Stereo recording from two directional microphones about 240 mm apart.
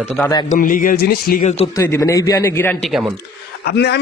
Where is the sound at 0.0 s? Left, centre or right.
Centre.